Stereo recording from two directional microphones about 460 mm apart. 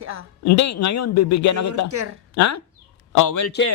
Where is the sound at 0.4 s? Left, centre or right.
Left.